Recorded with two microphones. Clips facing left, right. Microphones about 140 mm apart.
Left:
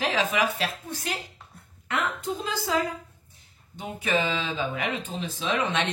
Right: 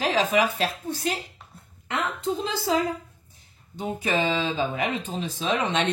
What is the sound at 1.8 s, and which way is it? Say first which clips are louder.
Speech: right 1 dB; 25° right (ahead or behind).